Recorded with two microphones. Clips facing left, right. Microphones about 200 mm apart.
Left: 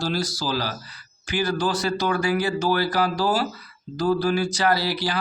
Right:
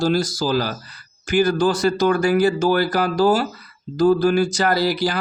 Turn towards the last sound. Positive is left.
turn(degrees=-45)  # may be behind; listen again after turning